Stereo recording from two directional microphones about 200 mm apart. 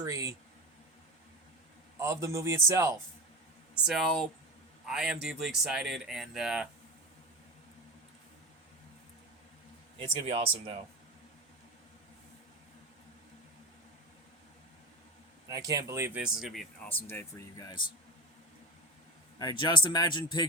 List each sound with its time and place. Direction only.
0.0 s a man's voice: 15° right (ahead or behind)
2.0 s a man's voice: 15° right (ahead or behind)
3.8 s speech: centre (ahead or behind)
10.0 s speech: 30° right (ahead or behind)
15.4 s speech: 20° right (ahead or behind); by 17.8 s 20° left (ahead or behind)
19.4 s speech: 20° left (ahead or behind)